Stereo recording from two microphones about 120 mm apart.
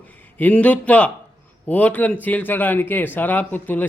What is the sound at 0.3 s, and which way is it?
A man's voice, 10° left (ahead or behind).